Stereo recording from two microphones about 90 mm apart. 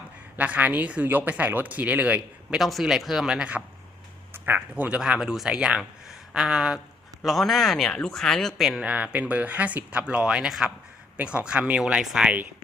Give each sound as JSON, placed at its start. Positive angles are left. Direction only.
{"t": 0.3, "sound": "speech", "side_deg": -15}
{"t": 2.6, "sound": "speech", "side_deg": 0}
{"t": 4.4, "sound": "speech", "side_deg": -20}
{"t": 8.8, "sound": "speech", "side_deg": -15}